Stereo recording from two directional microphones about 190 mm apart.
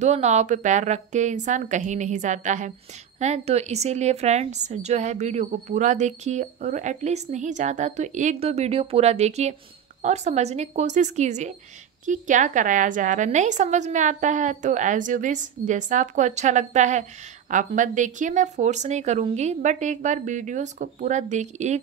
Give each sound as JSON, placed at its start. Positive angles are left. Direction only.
{"t": 0.0, "sound": "a woman's voice", "side_deg": -35}